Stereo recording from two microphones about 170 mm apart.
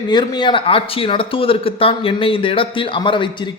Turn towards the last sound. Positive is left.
turn(degrees=30)  # may be behind; listen again after turning